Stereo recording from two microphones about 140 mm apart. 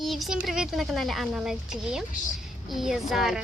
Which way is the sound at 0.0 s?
Centre (ahead or behind).